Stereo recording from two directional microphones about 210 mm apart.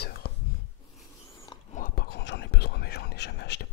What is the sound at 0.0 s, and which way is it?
Whispering, 50° left (ahead or behind).